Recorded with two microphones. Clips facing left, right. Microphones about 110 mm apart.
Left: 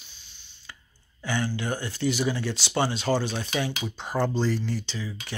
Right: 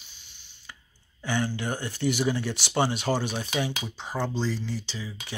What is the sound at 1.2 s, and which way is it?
Speech, 20° right (ahead or behind).